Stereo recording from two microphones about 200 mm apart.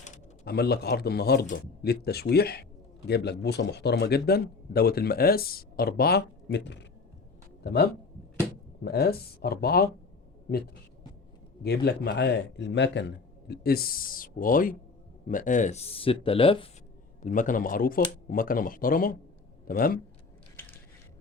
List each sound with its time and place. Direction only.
0.4 s a man's voice: 50° left (ahead or behind)
11.6 s speech: 55° left (ahead or behind); by 16.6 s 25° left (ahead or behind)
17.2 s speech: 40° left (ahead or behind)